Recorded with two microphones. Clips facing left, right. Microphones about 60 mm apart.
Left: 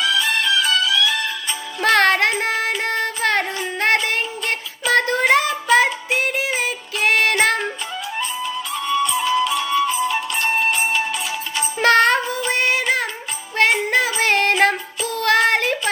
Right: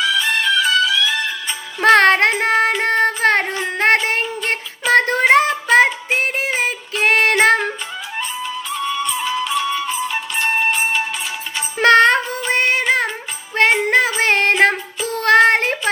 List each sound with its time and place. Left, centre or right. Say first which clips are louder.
0.0 s music: right 2 dB; centre
1.8 s music: right 4 dB; right
2.8 s child singing: right 5 dB; right
3.6 s music: right 3 dB; right
8.7 s music: left 2 dB; centre
11.8 s music: right 3 dB; right
14.6 s child singing: right 2 dB; right